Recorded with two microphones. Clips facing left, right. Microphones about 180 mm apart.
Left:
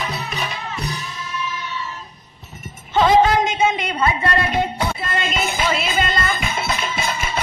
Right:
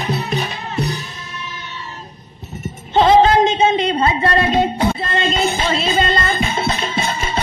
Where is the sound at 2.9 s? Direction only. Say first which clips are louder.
Right 3 dB; 30° right (ahead or behind).